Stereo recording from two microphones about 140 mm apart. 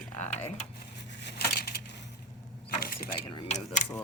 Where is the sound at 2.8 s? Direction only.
90° left.